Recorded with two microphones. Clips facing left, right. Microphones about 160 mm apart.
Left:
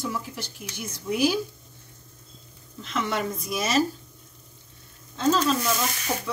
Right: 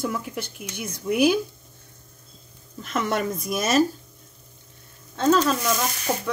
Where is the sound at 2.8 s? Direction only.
50° right (ahead or behind).